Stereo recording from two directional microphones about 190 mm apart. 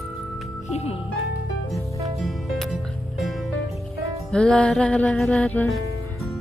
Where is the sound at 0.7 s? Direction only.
35° left (ahead or behind).